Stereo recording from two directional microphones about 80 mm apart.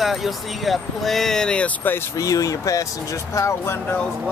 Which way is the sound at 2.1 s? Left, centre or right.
Left.